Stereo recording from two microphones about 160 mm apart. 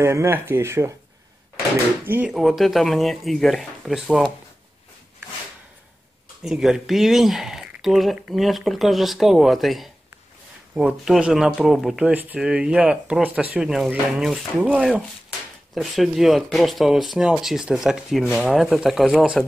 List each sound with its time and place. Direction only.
0.0 s speech: 15° right (ahead or behind)
2.0 s speech: 10° right (ahead or behind)
2.3 s speech: centre (ahead or behind)
6.4 s speech: 5° right (ahead or behind)